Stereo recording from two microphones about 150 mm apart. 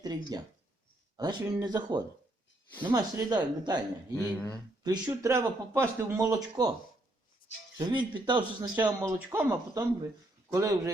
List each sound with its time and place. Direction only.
0.0 s speech: 25° right (ahead or behind)
4.1 s speech: 15° left (ahead or behind)
4.8 s speech: 25° right (ahead or behind)
7.8 s speech: 30° right (ahead or behind)
8.7 s speech: 10° right (ahead or behind)